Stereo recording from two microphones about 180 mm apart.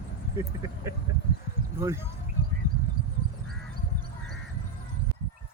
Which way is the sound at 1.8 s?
15° right (ahead or behind).